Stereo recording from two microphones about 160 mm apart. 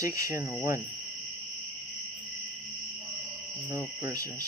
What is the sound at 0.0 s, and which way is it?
Speech, 20° right (ahead or behind).